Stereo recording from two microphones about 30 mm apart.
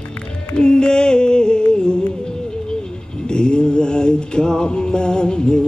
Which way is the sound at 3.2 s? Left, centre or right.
Left.